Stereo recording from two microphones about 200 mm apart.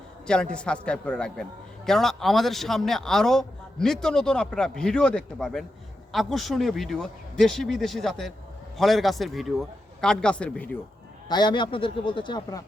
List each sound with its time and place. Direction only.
0.3 s a man's voice: 5° left (ahead or behind)
11.3 s a man's voice: 20° left (ahead or behind)